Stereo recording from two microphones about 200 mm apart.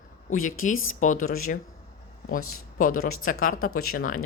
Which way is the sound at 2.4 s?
90° left.